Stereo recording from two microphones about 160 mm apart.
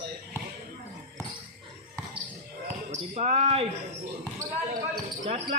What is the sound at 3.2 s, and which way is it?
Speech, 40° right (ahead or behind).